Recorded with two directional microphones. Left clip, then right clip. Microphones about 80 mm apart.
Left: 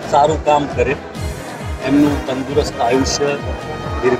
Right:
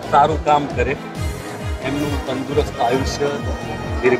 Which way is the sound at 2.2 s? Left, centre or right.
Left.